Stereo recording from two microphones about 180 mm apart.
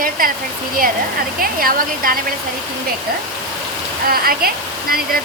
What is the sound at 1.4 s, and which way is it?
Speech, 55° right (ahead or behind).